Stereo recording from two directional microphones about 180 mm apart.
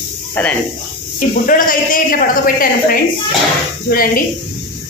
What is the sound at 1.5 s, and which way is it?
A woman's voice, 50° left (ahead or behind).